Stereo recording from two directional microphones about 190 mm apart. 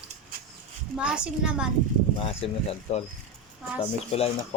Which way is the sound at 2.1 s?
30° left (ahead or behind).